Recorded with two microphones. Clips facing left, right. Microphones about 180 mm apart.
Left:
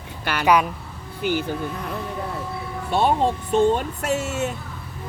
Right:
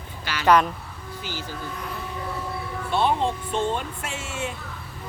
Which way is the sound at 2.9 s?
45° left (ahead or behind).